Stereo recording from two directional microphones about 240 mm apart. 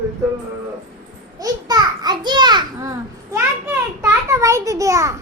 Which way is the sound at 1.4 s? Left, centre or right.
Centre.